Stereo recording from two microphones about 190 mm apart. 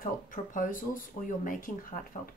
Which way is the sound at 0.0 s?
45° left (ahead or behind).